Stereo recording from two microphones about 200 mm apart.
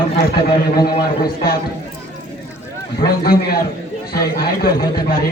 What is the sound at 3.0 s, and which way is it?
Speech, 50° left (ahead or behind).